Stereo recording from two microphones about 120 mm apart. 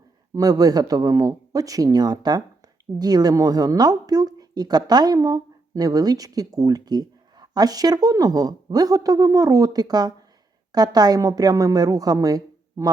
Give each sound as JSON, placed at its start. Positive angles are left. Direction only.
{"t": 0.3, "sound": "a woman's voice", "side_deg": -30}